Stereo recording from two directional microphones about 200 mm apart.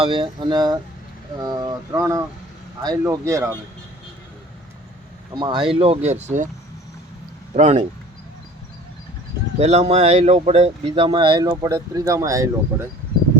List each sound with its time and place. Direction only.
0.0 s speech: 25° right (ahead or behind)
5.3 s speech: 20° right (ahead or behind)
7.5 s speech: 35° right (ahead or behind)
9.6 s speech: 30° right (ahead or behind); by 12.9 s 15° right (ahead or behind)